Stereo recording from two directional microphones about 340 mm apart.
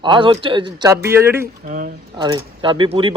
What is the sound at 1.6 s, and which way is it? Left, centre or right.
Speech, right.